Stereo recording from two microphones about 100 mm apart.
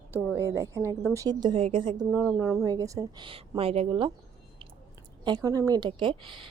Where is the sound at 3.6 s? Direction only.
75° right (ahead or behind).